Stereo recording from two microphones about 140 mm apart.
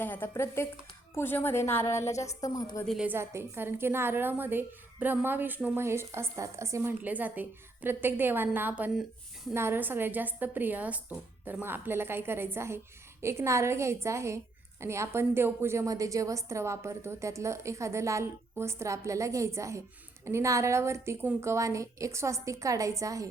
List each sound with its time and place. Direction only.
0.0 s a woman's voice: 15° left (ahead or behind)
2.8 s a woman's voice: centre (ahead or behind)
3.1 s a woman's voice: 15° right (ahead or behind)